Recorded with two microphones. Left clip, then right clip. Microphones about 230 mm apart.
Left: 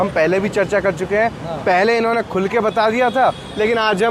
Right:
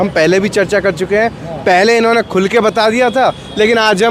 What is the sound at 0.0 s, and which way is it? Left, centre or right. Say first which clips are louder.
Speech: right 5 dB; right.